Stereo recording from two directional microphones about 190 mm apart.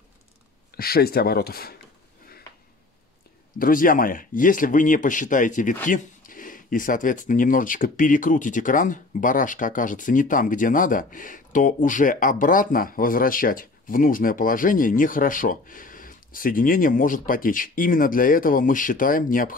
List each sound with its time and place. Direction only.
0.7 s speech: 55° left (ahead or behind)
3.5 s speech: 50° left (ahead or behind)